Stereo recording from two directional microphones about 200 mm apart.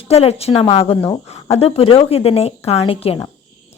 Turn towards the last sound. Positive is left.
turn(degrees=30)  # may be behind; listen again after turning